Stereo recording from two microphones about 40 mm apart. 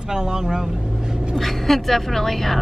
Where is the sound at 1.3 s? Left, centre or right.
Centre.